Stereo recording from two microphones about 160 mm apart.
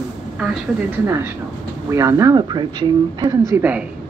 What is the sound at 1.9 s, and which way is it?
Speech, 20° right (ahead or behind).